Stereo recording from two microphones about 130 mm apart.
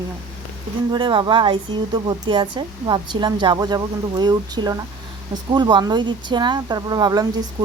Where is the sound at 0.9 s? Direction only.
35° right (ahead or behind).